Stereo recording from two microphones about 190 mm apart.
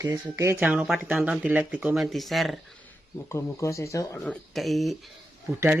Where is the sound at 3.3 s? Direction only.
15° left (ahead or behind).